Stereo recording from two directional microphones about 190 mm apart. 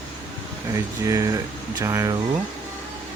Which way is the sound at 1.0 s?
15° right (ahead or behind).